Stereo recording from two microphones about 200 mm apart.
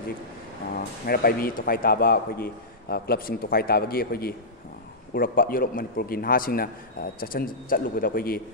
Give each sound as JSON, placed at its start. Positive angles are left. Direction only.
{"t": 1.0, "sound": "a man's voice", "side_deg": 50}